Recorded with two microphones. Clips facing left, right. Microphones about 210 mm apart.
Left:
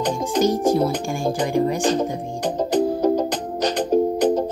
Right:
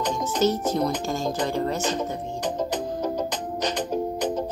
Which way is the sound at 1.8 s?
35° left (ahead or behind).